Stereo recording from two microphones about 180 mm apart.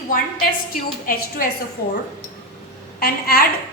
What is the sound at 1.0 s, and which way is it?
Speech, 50° left (ahead or behind).